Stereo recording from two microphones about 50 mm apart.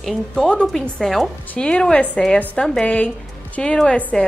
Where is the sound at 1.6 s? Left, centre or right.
Left.